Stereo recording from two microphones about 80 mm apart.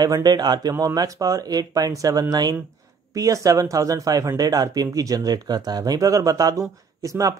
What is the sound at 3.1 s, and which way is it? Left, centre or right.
Speech, right.